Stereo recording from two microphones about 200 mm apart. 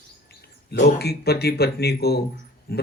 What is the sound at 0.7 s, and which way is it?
Speech, 50° left (ahead or behind).